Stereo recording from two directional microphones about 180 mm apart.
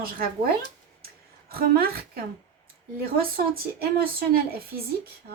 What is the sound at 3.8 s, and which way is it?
Speech, 55° right (ahead or behind).